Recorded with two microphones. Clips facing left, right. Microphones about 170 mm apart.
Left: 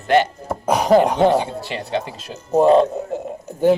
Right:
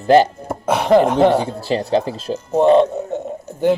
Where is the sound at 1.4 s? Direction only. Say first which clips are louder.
Right 6 dB; 35° right (ahead or behind).